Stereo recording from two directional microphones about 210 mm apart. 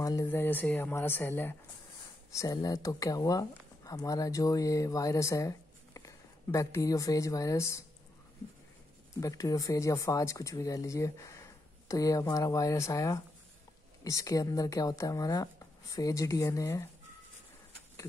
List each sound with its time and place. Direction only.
0.0 s speech: 15° left (ahead or behind)
9.2 s speech: 15° left (ahead or behind)